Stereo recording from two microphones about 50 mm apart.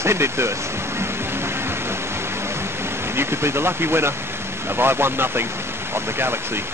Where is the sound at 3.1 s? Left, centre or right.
Right.